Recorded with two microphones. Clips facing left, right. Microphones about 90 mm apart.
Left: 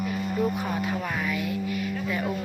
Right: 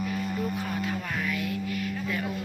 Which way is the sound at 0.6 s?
20° left (ahead or behind).